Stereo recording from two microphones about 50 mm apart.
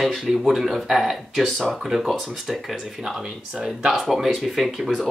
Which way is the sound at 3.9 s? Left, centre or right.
Centre.